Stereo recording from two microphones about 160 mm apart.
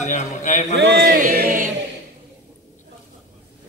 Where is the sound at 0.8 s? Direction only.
65° right (ahead or behind).